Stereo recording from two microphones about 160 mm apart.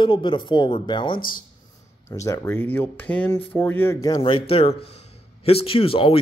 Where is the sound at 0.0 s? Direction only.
30° left (ahead or behind).